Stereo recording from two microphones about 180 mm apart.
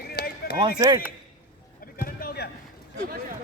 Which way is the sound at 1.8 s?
55° left (ahead or behind).